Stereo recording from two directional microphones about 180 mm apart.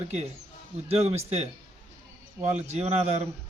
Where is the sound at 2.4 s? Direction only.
35° right (ahead or behind).